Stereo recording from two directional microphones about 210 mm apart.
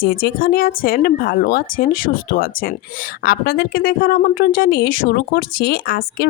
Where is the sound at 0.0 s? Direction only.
45° left (ahead or behind).